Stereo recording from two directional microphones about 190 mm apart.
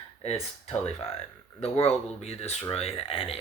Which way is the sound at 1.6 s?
35° left (ahead or behind).